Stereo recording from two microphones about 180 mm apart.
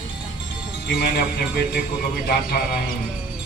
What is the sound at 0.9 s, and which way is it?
Speech, 65° left (ahead or behind).